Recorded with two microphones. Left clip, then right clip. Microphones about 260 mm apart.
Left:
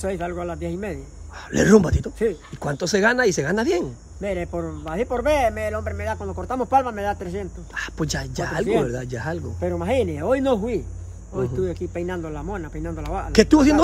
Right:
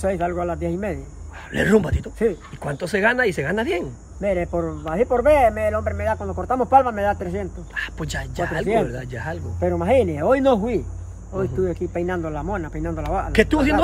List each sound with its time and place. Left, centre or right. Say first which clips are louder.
0.0 s speech: right 4 dB; centre
1.6 s speech: left 2 dB; left
4.2 s speech: right 5 dB; centre
8.0 s speech: even; left
9.6 s speech: right 5 dB; centre